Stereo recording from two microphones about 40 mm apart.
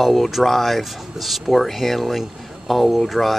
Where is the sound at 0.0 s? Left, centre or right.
Centre.